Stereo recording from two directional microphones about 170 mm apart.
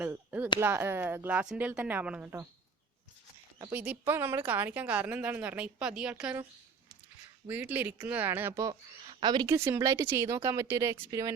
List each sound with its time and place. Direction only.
0.0 s chop: 10° right (ahead or behind)
0.6 s a woman's voice: 15° right (ahead or behind)
3.6 s a woman's voice: 10° right (ahead or behind)
7.4 s a woman's voice: 10° right (ahead or behind)
9.0 s a sound: 25° right (ahead or behind)
9.6 s a woman's voice: 15° right (ahead or behind)